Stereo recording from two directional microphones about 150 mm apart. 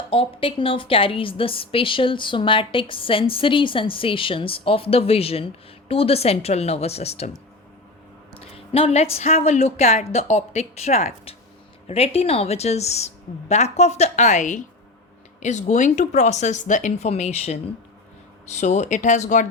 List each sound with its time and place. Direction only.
0.1 s a woman's voice: 40° left (ahead or behind)
8.4 s a sound: 40° left (ahead or behind)
9.1 s speech: 45° left (ahead or behind)